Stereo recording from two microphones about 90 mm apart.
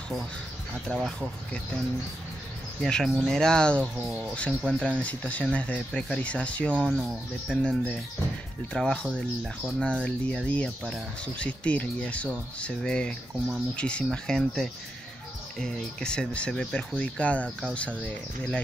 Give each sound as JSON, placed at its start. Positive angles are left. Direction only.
{"t": 0.9, "sound": "speech", "side_deg": -5}
{"t": 2.8, "sound": "speech", "side_deg": 5}
{"t": 4.5, "sound": "speech", "side_deg": -5}
{"t": 4.8, "sound": "speech", "side_deg": 15}
{"t": 6.9, "sound": "speech", "side_deg": 0}
{"t": 7.6, "sound": "speech", "side_deg": 15}
{"t": 9.4, "sound": "speech", "side_deg": 0}
{"t": 9.8, "sound": "speech", "side_deg": 15}